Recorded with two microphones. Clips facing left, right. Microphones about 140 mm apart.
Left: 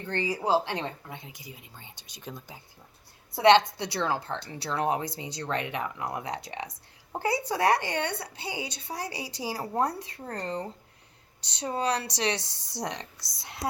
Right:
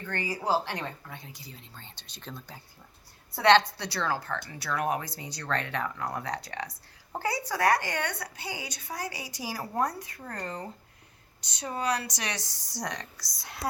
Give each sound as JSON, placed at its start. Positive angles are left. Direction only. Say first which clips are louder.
{"t": 0.0, "sound": "speech", "louder": "left 3 dB", "side_deg": 25}